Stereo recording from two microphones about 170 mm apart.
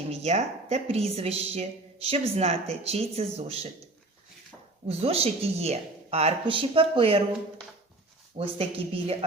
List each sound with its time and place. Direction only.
0.1 s a woman's voice: 40° right (ahead or behind)
4.9 s a woman's voice: 35° right (ahead or behind)
8.4 s a woman's voice: 35° right (ahead or behind)